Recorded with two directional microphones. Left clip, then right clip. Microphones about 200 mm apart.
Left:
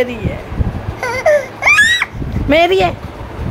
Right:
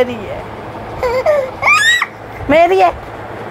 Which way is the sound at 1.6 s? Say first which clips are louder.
Even; 15° left (ahead or behind).